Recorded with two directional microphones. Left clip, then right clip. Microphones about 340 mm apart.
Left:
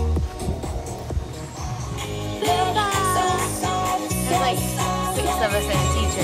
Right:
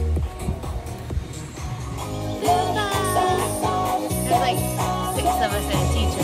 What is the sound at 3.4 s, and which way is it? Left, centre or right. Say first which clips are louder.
Music: right 1 dB; centre.